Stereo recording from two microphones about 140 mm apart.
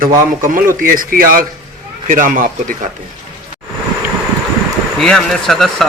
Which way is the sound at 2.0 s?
70° right (ahead or behind).